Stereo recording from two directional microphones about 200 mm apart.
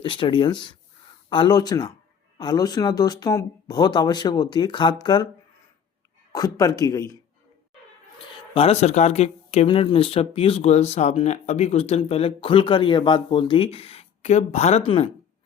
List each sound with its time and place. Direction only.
0.0 s speech: 25° left (ahead or behind)
6.3 s speech: 20° left (ahead or behind)
8.5 s speech: 30° left (ahead or behind)